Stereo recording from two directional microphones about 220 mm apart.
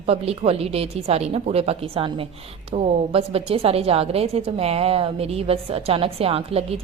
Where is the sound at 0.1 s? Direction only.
25° right (ahead or behind).